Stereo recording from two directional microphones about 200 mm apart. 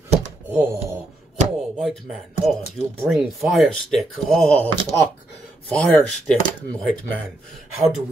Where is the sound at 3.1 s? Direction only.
Centre (ahead or behind).